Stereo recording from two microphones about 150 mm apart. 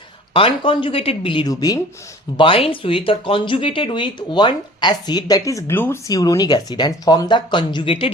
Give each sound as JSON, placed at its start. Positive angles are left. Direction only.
{"t": 0.3, "sound": "speech", "side_deg": 35}
{"t": 2.4, "sound": "speech", "side_deg": 35}